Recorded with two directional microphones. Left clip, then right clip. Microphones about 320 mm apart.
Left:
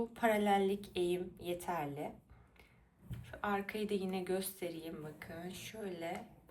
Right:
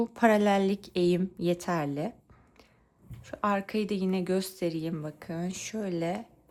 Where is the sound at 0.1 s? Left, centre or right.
Right.